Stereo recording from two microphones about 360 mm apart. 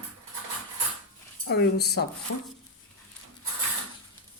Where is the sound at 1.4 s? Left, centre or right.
Left.